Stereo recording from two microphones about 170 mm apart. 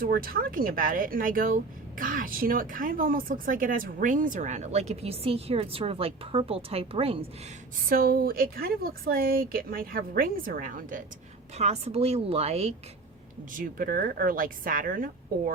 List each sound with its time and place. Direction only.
0.0 s speech: 60° right (ahead or behind); by 7.3 s 35° right (ahead or behind)
7.9 s speech: 60° right (ahead or behind)
11.5 s speech: 40° right (ahead or behind)
13.5 s speech: 55° right (ahead or behind)